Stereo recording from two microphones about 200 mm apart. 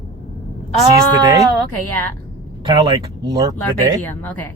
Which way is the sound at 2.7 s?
25° right (ahead or behind).